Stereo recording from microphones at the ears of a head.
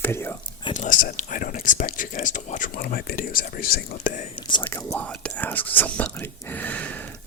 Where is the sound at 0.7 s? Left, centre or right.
Left.